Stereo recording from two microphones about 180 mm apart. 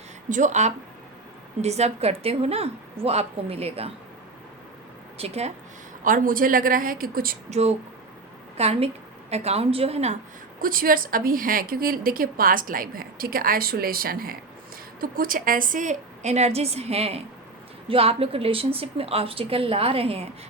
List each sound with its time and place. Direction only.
0.3 s a woman's voice: 45° right (ahead or behind)
5.1 s a woman's voice: 35° right (ahead or behind)
6.0 s a woman's voice: 50° right (ahead or behind)
7.5 s a woman's voice: 35° right (ahead or behind)
10.6 s a woman's voice: 50° right (ahead or behind); by 20.2 s 30° right (ahead or behind)